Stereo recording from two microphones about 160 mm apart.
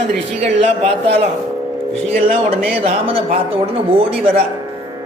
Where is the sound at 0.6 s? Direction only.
40° right (ahead or behind).